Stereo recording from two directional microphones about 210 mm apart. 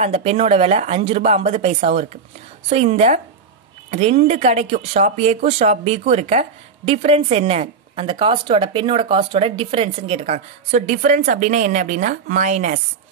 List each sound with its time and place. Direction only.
0.0 s a woman's voice: 30° right (ahead or behind)